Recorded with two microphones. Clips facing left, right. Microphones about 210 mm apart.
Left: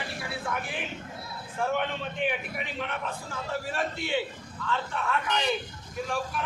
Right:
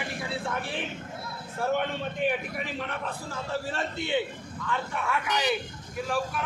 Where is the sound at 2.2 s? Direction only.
40° right (ahead or behind).